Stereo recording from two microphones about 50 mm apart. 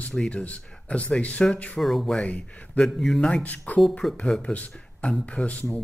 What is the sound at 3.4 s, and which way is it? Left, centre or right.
Speech, left.